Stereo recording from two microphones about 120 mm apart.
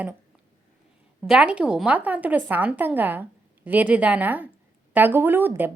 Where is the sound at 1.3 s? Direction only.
10° right (ahead or behind).